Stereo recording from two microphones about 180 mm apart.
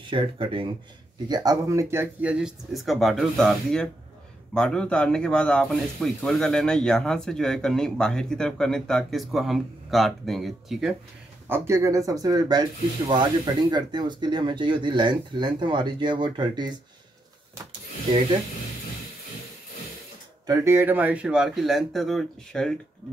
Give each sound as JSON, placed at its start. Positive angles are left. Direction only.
{"t": 0.0, "sound": "speech", "side_deg": -30}
{"t": 11.4, "sound": "speech", "side_deg": -15}
{"t": 20.4, "sound": "speech", "side_deg": -15}